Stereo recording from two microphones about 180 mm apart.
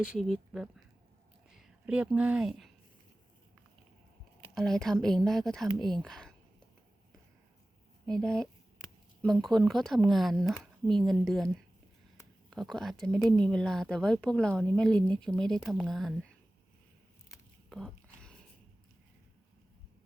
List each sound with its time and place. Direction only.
0.0 s speech: centre (ahead or behind)
4.5 s speech: centre (ahead or behind)
8.0 s speech: 5° left (ahead or behind)
17.7 s a sound: 5° left (ahead or behind)